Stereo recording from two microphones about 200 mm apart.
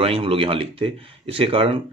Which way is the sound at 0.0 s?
25° right (ahead or behind).